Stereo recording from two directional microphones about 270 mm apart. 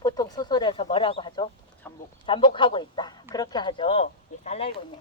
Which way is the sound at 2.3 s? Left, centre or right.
Centre.